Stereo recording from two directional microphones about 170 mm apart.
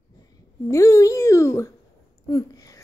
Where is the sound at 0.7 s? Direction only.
20° left (ahead or behind).